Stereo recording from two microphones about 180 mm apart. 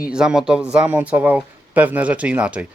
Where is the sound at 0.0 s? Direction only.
5° right (ahead or behind).